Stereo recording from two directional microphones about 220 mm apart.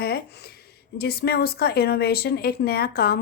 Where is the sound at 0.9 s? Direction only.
45° left (ahead or behind).